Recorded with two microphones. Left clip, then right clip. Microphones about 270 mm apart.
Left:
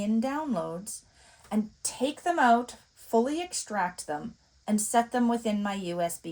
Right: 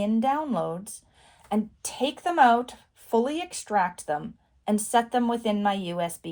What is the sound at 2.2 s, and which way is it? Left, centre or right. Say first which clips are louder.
Speech: right 3 dB; right.